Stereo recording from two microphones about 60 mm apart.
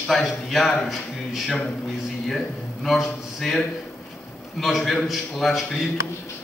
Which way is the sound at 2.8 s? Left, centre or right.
Centre.